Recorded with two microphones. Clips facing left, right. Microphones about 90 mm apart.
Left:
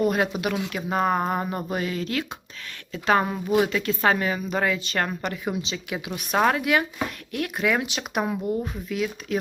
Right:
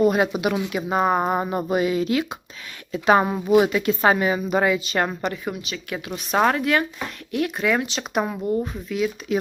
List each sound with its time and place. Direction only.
0.0 s speech: 5° right (ahead or behind)
5.5 s speech: 15° left (ahead or behind)